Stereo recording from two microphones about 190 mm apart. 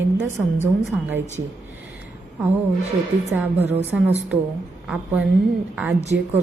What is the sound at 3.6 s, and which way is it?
Speech, 35° right (ahead or behind).